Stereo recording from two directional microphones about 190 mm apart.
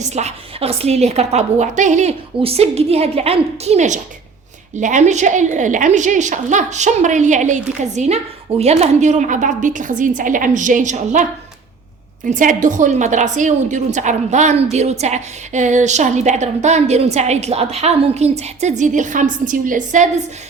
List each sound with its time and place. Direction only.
0.0 s a woman's voice: 35° right (ahead or behind)